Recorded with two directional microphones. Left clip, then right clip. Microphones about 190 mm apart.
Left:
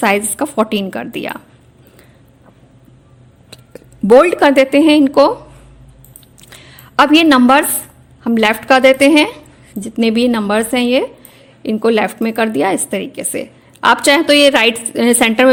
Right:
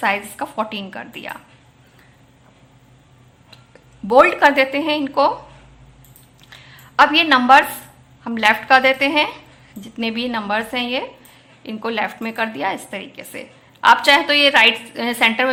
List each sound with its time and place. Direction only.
0.0 s a woman's voice: 50° left (ahead or behind)
3.5 s speech: 45° left (ahead or behind)
6.5 s a sound: 45° left (ahead or behind)
8.2 s a woman's voice: 45° left (ahead or behind)